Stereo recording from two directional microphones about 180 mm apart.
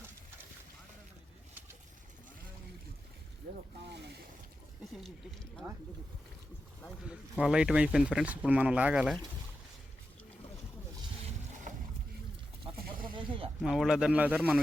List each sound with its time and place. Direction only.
3.8 s boat: 70° right (ahead or behind)
4.9 s speech: centre (ahead or behind)
7.1 s speech: 5° right (ahead or behind)
11.7 s boat: 45° right (ahead or behind)
13.1 s snake: 30° right (ahead or behind)
13.6 s speech: centre (ahead or behind)